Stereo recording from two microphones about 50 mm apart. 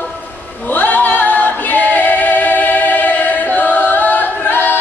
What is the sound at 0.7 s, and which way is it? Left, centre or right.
Singing, left.